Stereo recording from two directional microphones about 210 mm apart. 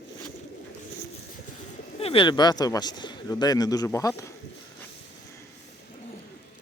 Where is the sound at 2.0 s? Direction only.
25° left (ahead or behind).